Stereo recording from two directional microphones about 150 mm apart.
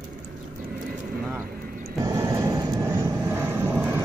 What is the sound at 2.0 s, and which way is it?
Vehicle, 25° right (ahead or behind).